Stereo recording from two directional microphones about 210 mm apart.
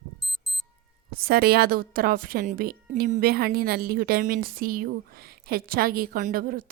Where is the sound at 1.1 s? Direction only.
45° right (ahead or behind).